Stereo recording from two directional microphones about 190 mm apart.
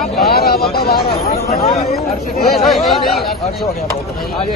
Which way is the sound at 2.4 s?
Centre (ahead or behind).